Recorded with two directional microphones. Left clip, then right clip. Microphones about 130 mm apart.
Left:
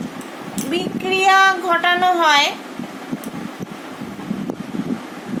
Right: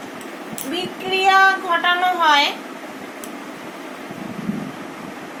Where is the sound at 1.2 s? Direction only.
70° left (ahead or behind).